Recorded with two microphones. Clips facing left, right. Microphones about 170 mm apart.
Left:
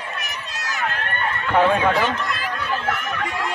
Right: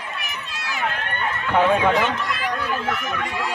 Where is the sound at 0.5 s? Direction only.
40° left (ahead or behind).